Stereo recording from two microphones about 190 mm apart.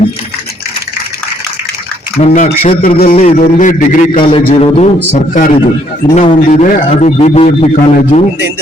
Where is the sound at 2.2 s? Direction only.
40° left (ahead or behind).